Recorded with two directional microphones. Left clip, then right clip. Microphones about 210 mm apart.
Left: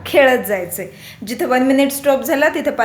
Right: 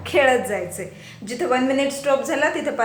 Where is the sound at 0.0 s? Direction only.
40° left (ahead or behind).